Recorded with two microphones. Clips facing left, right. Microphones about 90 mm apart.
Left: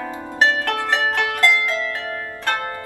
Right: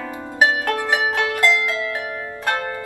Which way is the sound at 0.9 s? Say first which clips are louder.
Even; 15° right (ahead or behind).